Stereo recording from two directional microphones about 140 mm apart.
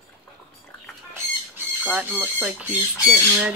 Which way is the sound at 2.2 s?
10° right (ahead or behind).